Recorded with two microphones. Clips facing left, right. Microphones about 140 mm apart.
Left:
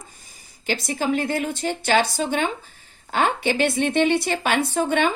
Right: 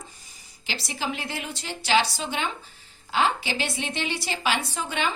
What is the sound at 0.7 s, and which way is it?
Speech, 50° left (ahead or behind).